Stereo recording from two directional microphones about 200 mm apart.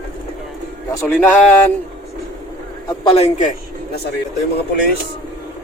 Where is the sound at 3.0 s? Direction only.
30° left (ahead or behind).